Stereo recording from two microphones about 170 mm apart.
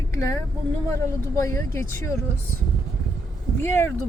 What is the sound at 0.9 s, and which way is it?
Speech, 15° left (ahead or behind).